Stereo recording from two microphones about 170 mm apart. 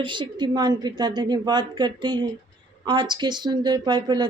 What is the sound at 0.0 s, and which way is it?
A woman's voice, 25° right (ahead or behind).